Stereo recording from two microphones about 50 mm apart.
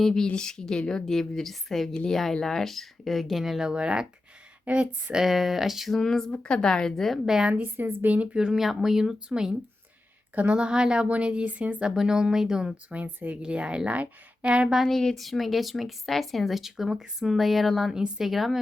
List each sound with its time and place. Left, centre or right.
0.0 s a woman's voice: centre
3.6 s a woman's voice: centre
5.1 s speech: centre
6.0 s a woman's voice: centre
7.3 s a woman's voice: centre
7.5 s a woman's voice: right
8.0 s a woman's voice: right
8.4 s a woman's voice: centre; by 11.8 s right
11.8 s a woman's voice: centre
14.8 s speech: centre